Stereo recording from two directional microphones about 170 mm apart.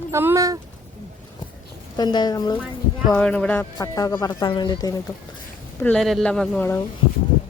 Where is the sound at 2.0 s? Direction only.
25° left (ahead or behind).